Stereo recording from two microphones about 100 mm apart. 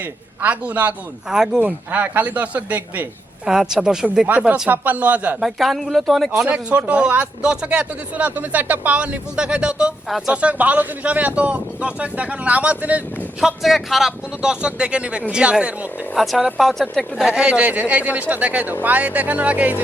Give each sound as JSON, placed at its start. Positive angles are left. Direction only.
{"t": 0.4, "sound": "speech", "side_deg": -15}
{"t": 3.4, "sound": "speech", "side_deg": -5}
{"t": 5.4, "sound": "speech", "side_deg": 0}
{"t": 13.4, "sound": "speech", "side_deg": 0}